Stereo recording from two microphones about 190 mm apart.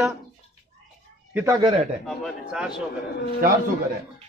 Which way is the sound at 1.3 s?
15° right (ahead or behind).